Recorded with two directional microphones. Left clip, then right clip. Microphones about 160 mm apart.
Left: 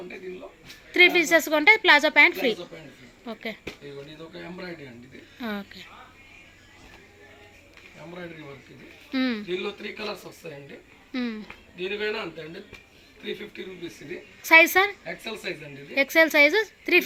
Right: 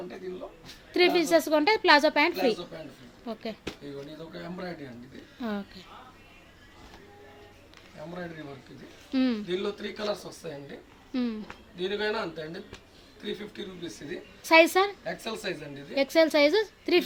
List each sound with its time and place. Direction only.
0.9 s a woman's voice: centre (ahead or behind)
4.4 s speech: 20° right (ahead or behind)
5.4 s a woman's voice: centre (ahead or behind)
9.1 s a woman's voice: centre (ahead or behind)
9.5 s speech: 20° right (ahead or behind)
11.1 s a woman's voice: centre (ahead or behind)
11.8 s a man's voice: 10° right (ahead or behind)
14.4 s a woman's voice: centre (ahead or behind)
15.2 s speech: 30° right (ahead or behind)
16.0 s a woman's voice: centre (ahead or behind)